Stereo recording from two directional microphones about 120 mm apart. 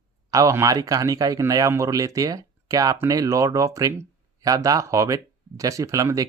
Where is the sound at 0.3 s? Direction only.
30° right (ahead or behind).